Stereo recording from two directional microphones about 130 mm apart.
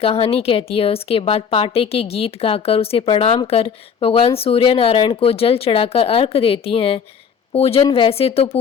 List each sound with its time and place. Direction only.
0.0 s a woman's voice: 50° left (ahead or behind)